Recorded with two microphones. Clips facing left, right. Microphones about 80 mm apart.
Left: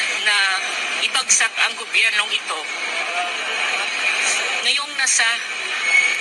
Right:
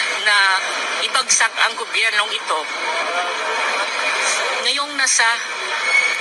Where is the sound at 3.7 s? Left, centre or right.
Right.